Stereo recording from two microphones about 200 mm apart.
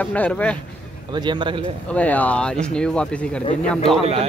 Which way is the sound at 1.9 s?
5° left (ahead or behind).